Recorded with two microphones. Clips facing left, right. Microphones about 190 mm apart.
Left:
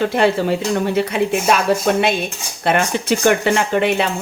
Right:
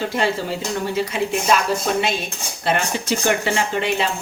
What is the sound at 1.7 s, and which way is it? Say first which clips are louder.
Speech: left 5 dB; 60° left (ahead or behind).